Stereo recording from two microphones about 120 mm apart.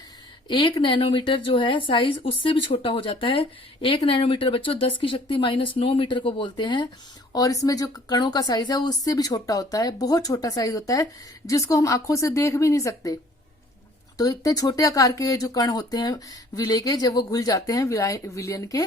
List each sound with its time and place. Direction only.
0.4 s speech: 45° left (ahead or behind); by 13.1 s 30° left (ahead or behind)
14.2 s speech: 30° left (ahead or behind)